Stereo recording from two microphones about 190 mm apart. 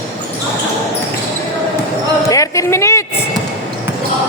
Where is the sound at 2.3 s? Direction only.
15° left (ahead or behind).